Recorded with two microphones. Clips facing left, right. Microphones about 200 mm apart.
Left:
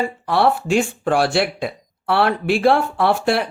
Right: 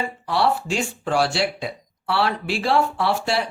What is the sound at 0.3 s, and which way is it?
Speech, 55° left (ahead or behind).